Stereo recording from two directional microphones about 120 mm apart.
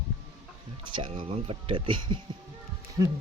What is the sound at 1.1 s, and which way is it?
Speech, 50° right (ahead or behind).